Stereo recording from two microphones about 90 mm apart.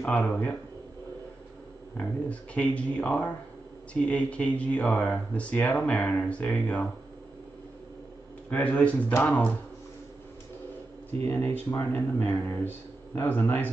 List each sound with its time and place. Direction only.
0.0 s speech: 15° left (ahead or behind)
2.0 s speech: 15° left (ahead or behind)
8.5 s speech: 15° left (ahead or behind)
11.2 s speech: 20° left (ahead or behind)